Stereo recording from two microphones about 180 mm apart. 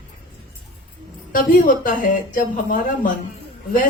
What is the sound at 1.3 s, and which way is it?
Speech, 50° left (ahead or behind).